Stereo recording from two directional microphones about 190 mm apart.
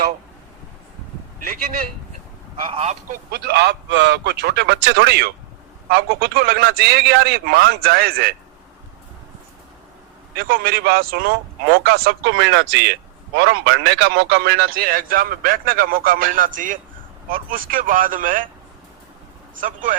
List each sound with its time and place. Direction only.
2.6 s a man's voice: 30° right (ahead or behind)
3.1 s a man's voice: 55° right (ahead or behind)
10.3 s speech: 50° right (ahead or behind)
19.5 s speech: 45° right (ahead or behind)